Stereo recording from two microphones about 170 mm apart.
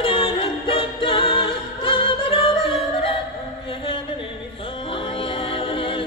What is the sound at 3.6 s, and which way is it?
Music, 30° left (ahead or behind).